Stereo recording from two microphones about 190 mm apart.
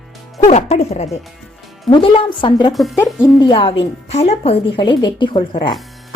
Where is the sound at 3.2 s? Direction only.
25° left (ahead or behind).